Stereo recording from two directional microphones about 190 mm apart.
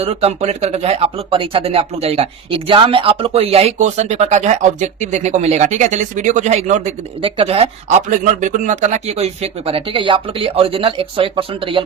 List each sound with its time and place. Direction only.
0.0 s speech: 30° right (ahead or behind)